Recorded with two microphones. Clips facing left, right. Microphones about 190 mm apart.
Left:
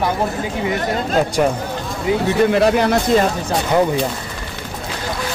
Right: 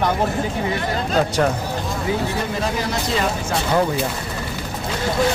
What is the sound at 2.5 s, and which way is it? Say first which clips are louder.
Speech: left 9 dB; 70° left (ahead or behind).